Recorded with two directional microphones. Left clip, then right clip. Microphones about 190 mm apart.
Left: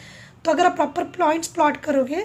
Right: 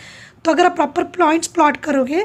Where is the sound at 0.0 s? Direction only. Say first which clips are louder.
Right 4 dB; 30° right (ahead or behind).